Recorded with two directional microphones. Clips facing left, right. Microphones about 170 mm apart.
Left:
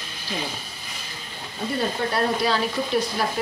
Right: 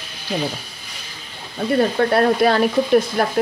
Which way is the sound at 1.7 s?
60° right (ahead or behind).